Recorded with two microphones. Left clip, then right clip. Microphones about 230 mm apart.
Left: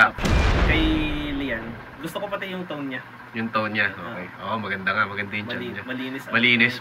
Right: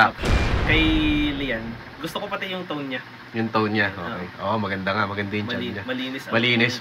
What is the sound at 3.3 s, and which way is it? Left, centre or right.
Speech, centre.